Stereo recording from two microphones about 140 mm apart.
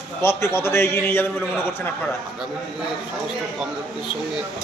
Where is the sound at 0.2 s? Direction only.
20° left (ahead or behind).